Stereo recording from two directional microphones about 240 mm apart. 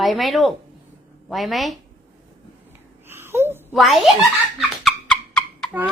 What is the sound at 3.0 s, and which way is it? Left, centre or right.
Babbling, centre.